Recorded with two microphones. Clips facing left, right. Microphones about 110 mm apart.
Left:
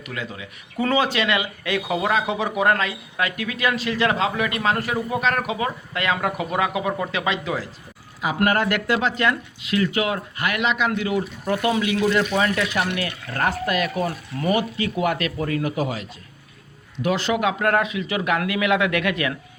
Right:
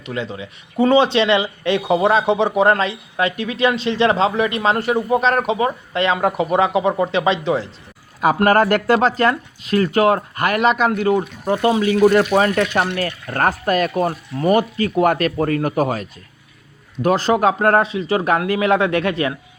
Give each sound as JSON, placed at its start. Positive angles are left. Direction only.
{"t": 0.0, "sound": "speech", "side_deg": -25}
{"t": 8.4, "sound": "speech", "side_deg": -40}
{"t": 11.4, "sound": "speech", "side_deg": -25}
{"t": 12.3, "sound": "speech", "side_deg": -35}